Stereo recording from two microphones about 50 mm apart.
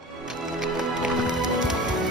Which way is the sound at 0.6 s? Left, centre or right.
Centre.